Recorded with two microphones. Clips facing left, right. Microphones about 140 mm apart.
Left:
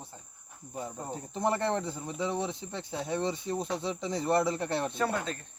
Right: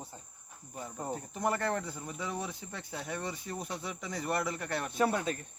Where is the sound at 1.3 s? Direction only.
25° left (ahead or behind).